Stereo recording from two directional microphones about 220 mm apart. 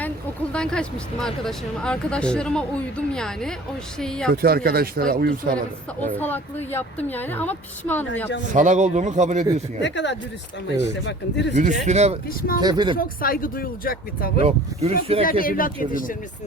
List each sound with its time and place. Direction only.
0.5 s speech: 5° left (ahead or behind)
4.4 s speech: 45° right (ahead or behind)
6.1 s a woman's voice: 10° left (ahead or behind)
8.5 s speech: 35° right (ahead or behind)
9.8 s speech: 55° left (ahead or behind)
11.5 s speech: 35° right (ahead or behind)
12.3 s speech: 40° left (ahead or behind)
12.5 s speech: 20° right (ahead or behind)
13.0 s speech: 40° left (ahead or behind)
14.4 s speech: 30° right (ahead or behind)
15.3 s speech: 40° left (ahead or behind)